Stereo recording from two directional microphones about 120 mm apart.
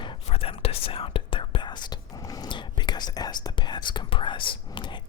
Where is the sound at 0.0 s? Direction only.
50° left (ahead or behind).